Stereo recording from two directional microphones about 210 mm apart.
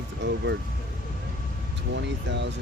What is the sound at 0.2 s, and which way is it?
Speech, 55° right (ahead or behind).